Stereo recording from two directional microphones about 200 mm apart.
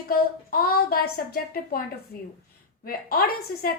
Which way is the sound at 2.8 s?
50° left (ahead or behind).